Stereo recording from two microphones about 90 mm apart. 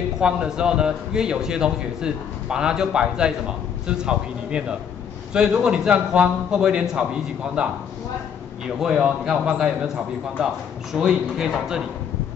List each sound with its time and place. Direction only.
0.2 s a man's voice: 10° right (ahead or behind)